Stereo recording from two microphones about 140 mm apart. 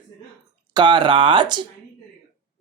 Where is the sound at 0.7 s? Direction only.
35° right (ahead or behind).